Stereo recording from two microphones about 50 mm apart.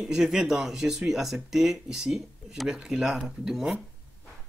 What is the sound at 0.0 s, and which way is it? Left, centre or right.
Speech, centre.